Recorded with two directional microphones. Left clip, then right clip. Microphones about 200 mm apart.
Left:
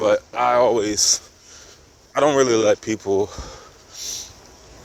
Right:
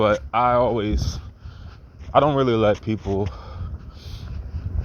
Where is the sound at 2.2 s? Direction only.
30° left (ahead or behind).